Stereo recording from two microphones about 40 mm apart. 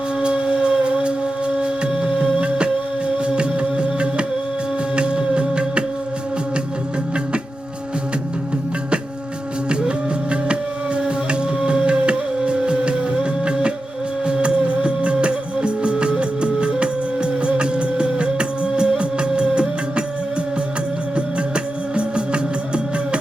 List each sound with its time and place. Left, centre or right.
0.2 s music: right
10.5 s music: right
21.2 s music: right